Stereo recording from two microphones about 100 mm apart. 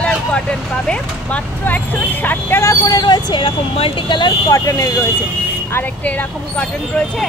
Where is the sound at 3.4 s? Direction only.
60° left (ahead or behind).